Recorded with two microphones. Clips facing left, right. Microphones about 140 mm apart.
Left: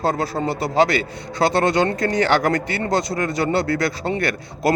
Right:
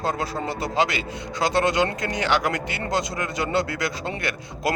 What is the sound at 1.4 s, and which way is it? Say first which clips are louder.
Speech: left 4 dB; 35° left (ahead or behind).